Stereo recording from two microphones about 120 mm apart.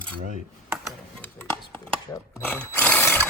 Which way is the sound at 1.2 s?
10° left (ahead or behind).